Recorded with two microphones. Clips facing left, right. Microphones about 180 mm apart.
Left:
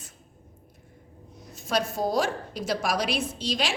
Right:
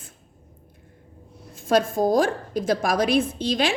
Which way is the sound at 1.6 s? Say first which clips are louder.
Right 7 dB; 50° right (ahead or behind).